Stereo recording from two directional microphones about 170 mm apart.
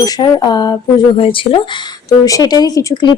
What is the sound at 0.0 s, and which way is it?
Speech, 25° left (ahead or behind).